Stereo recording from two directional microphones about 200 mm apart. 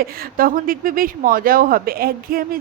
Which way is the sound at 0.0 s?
45° right (ahead or behind).